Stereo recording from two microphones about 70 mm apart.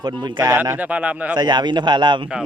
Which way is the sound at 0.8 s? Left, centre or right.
Centre.